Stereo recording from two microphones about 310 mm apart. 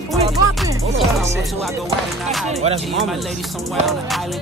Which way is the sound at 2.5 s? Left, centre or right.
Right.